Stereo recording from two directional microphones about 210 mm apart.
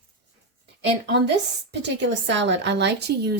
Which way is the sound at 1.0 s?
55° right (ahead or behind).